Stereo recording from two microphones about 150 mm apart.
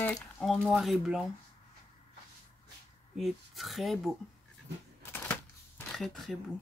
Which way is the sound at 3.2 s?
Centre (ahead or behind).